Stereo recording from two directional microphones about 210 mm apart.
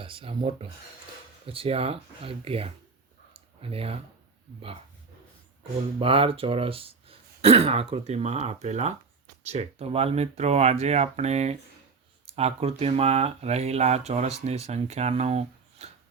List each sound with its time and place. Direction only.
0.0 s speech: 25° right (ahead or behind)
3.3 s clicking: 25° right (ahead or behind)
6.0 s speech: 25° right (ahead or behind)